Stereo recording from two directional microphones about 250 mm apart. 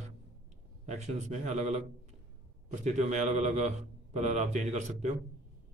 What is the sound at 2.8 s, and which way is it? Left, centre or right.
A man's voice, right.